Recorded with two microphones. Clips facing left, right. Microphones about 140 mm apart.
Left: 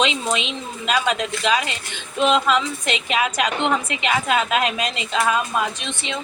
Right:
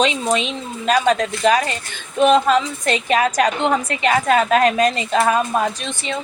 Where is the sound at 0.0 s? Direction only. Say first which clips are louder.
Right 3 dB; 40° right (ahead or behind).